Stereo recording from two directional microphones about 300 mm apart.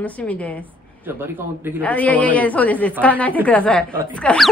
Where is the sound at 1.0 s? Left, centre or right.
Centre.